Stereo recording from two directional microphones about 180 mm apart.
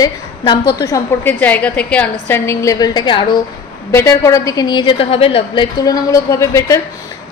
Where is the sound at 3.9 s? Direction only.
15° left (ahead or behind).